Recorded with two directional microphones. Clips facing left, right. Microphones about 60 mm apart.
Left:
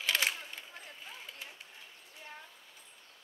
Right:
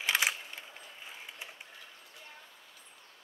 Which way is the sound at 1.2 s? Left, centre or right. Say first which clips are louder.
Right 1 dB; right.